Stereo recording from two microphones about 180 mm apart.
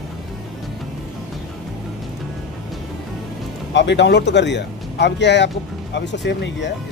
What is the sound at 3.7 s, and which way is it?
Speech, 75° left (ahead or behind).